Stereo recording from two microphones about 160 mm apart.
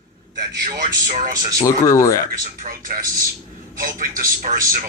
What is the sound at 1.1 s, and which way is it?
Speech, 55° right (ahead or behind).